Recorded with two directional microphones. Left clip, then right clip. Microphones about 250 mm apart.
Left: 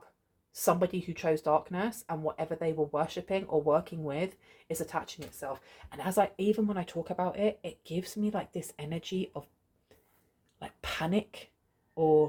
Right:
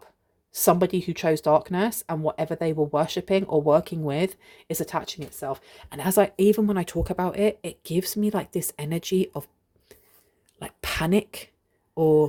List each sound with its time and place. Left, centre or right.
0.5 s speech: right
9.9 s a sound: right
10.6 s speech: right